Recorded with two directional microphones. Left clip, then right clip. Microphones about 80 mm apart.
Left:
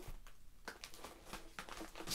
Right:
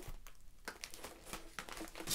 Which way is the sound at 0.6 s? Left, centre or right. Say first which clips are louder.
Right 3 dB; right.